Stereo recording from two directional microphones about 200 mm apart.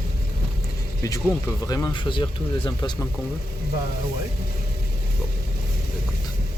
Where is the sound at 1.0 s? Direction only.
15° left (ahead or behind).